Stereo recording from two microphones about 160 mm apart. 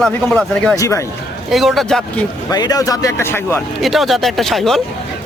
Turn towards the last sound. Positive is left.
turn(degrees=0)  # may be behind; listen again after turning